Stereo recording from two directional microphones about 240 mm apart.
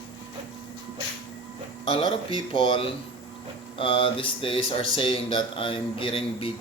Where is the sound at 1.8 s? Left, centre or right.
Left.